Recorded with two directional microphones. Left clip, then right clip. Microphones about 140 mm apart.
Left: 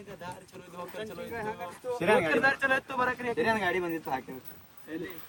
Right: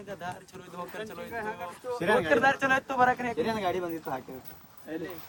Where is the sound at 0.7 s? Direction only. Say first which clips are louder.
Right 1 dB; 5° right (ahead or behind).